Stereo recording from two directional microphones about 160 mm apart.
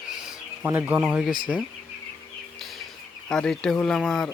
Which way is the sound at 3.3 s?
5° left (ahead or behind).